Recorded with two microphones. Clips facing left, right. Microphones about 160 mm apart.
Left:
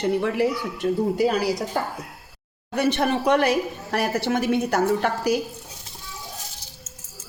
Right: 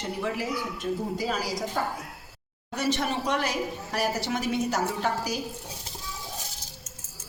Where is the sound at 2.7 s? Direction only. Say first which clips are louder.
Left 6 dB; 60° left (ahead or behind).